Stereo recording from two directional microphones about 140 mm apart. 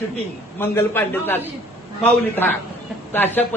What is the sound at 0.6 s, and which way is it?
Speech, 15° left (ahead or behind).